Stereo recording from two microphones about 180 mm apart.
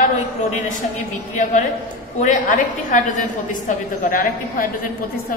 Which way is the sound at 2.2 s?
45° left (ahead or behind).